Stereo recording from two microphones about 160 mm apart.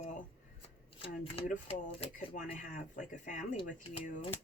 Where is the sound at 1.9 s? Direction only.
35° left (ahead or behind).